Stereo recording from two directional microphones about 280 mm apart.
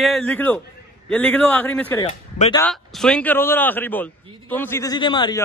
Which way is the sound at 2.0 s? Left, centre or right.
Left.